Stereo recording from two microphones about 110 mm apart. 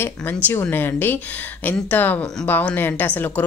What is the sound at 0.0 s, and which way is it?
Speech, 20° left (ahead or behind).